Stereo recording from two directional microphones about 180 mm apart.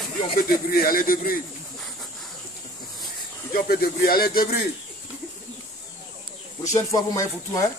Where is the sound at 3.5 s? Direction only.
55° left (ahead or behind).